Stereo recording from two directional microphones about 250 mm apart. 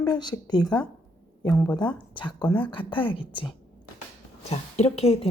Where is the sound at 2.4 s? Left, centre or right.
Centre.